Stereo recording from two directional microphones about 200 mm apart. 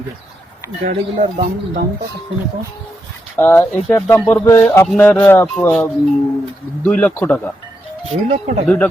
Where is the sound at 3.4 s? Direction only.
10° left (ahead or behind).